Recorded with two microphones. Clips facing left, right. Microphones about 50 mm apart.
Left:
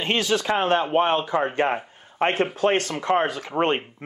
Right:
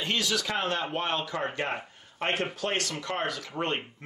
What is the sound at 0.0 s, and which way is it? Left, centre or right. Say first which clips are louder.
A man's voice: left 6 dB; left.